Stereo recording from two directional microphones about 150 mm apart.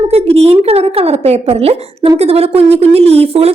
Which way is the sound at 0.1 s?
40° right (ahead or behind).